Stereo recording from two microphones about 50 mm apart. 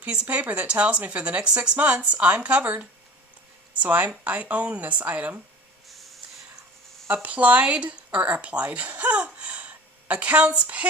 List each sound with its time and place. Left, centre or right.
0.0 s speech: right
3.8 s speech: right
7.1 s speech: right